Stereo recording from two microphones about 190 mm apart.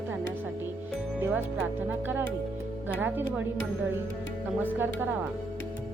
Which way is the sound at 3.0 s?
10° right (ahead or behind).